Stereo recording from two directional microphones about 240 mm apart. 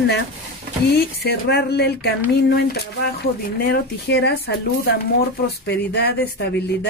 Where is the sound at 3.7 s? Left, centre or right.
Left.